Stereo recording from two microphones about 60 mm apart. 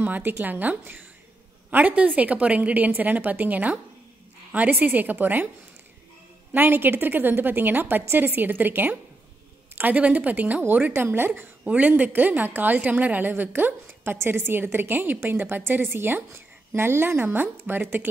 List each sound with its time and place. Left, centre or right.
0.0 s a woman's voice: right
6.5 s a woman's voice: right
10.6 s a woman's voice: right
11.6 s a woman's voice: right